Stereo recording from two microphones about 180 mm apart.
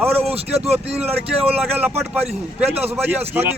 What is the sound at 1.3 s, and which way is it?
Speech, 10° right (ahead or behind).